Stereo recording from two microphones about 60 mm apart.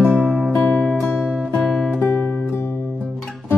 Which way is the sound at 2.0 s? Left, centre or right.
Left.